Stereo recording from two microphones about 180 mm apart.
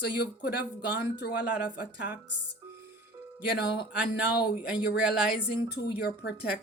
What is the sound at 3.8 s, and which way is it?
Speech, 65° left (ahead or behind).